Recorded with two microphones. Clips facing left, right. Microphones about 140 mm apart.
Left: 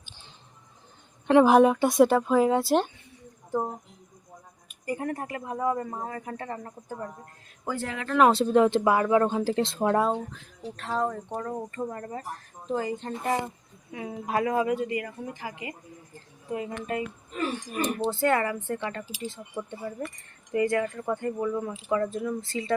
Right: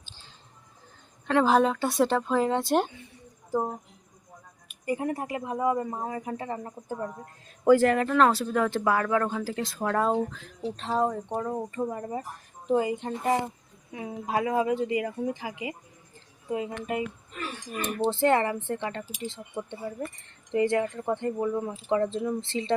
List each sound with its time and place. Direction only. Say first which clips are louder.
1.3 s speech: left 4 dB; 15° left (ahead or behind)
3.5 s a woman's voice: right 1 dB; 5° right (ahead or behind)
5.0 s speech: right 2 dB; 15° right (ahead or behind)
7.6 s speech: right 13 dB; 70° right (ahead or behind)
8.3 s speech: left 5 dB; 25° left (ahead or behind)
10.6 s speech: right 2 dB; 20° right (ahead or behind)
15.0 s speech: right 5 dB; 15° right (ahead or behind)
18.1 s speech: right 4 dB; 25° right (ahead or behind)